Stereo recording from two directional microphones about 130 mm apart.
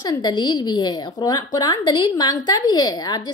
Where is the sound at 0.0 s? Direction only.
30° left (ahead or behind).